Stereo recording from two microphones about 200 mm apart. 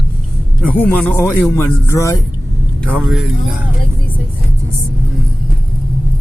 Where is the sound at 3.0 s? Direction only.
Centre (ahead or behind).